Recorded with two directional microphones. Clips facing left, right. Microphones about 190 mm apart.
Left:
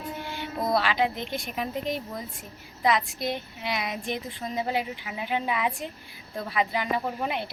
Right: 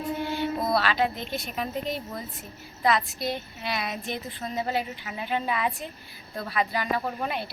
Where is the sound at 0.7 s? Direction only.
15° left (ahead or behind).